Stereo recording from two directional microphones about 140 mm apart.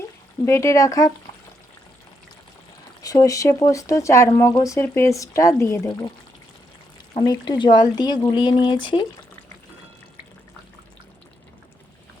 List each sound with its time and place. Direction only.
0.4 s speech: 20° left (ahead or behind)
3.0 s speech: 25° left (ahead or behind)
7.1 s speech: 30° left (ahead or behind)